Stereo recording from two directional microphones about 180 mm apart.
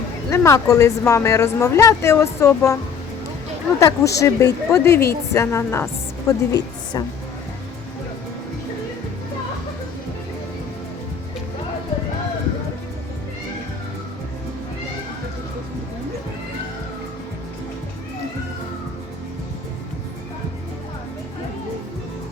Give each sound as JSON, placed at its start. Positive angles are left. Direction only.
{"t": 0.3, "sound": "speech", "side_deg": 15}
{"t": 3.8, "sound": "a woman's voice", "side_deg": 15}